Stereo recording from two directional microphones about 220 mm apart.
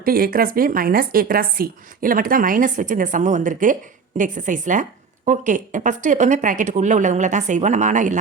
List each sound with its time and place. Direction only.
0.0 s a woman's voice: 40° right (ahead or behind)